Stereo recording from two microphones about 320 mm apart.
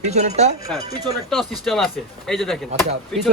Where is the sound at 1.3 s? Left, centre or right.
Centre.